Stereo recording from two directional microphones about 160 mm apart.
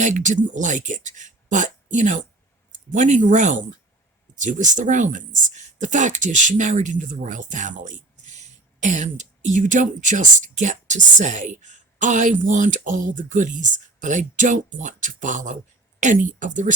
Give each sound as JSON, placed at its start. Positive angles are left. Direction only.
{"t": 0.0, "sound": "speech", "side_deg": -50}